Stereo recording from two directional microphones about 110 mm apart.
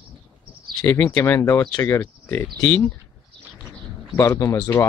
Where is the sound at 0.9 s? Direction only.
20° left (ahead or behind).